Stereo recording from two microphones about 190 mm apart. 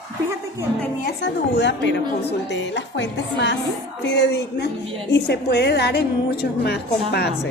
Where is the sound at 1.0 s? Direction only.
65° left (ahead or behind).